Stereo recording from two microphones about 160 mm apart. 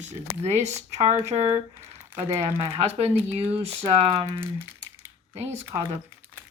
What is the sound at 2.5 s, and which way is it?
Speech, 35° right (ahead or behind).